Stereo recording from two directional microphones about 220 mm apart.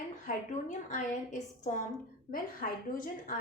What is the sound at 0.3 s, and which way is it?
A woman's voice, 35° left (ahead or behind).